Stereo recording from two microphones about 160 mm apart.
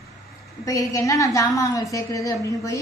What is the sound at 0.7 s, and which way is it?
A woman's voice, 20° left (ahead or behind).